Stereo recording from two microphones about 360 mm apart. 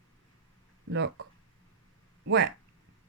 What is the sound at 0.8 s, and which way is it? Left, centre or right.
Speech, right.